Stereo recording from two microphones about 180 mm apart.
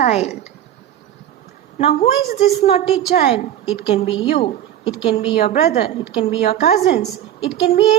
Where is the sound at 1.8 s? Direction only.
35° left (ahead or behind).